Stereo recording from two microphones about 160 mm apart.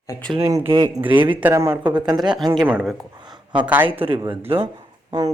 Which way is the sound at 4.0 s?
35° right (ahead or behind).